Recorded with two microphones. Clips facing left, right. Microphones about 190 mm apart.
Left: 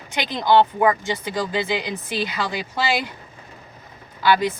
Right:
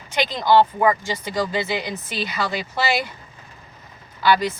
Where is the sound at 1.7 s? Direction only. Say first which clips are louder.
Left 1 dB; 15° left (ahead or behind).